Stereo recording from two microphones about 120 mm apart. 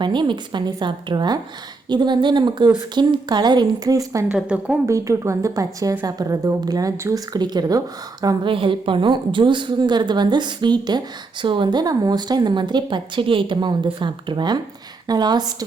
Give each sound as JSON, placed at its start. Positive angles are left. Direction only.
{"t": 0.0, "sound": "speech", "side_deg": -40}
{"t": 4.3, "sound": "a woman's voice", "side_deg": -10}
{"t": 4.9, "sound": "a woman's voice", "side_deg": -25}
{"t": 8.4, "sound": "speech", "side_deg": -45}